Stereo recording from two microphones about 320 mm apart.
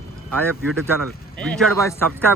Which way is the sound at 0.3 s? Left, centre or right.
Centre.